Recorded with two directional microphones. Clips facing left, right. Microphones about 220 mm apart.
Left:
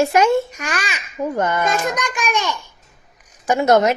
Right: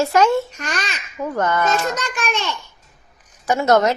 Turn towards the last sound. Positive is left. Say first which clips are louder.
# left 1 dB
turn(degrees=15)  # may be behind; listen again after turning